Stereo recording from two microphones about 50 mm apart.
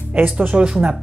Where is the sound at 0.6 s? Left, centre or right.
Right.